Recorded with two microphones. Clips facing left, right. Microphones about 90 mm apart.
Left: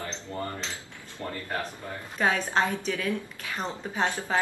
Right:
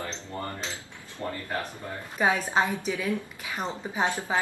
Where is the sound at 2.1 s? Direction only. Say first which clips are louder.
Right 1 dB; 10° right (ahead or behind).